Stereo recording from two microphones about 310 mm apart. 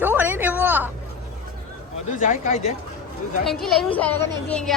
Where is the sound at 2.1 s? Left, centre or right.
Left.